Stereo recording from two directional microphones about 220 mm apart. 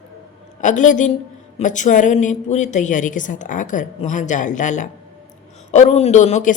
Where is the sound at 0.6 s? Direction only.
35° left (ahead or behind).